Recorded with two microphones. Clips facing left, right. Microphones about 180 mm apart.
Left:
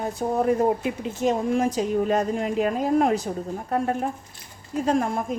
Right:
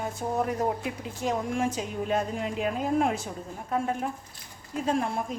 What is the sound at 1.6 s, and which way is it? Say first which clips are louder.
A woman's voice: left 7 dB; 35° left (ahead or behind).